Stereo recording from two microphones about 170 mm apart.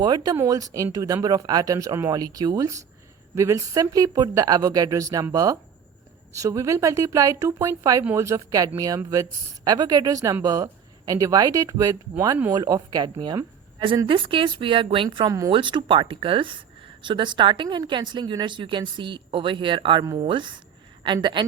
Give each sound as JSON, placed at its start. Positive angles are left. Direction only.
{"t": 0.0, "sound": "a woman's voice", "side_deg": -25}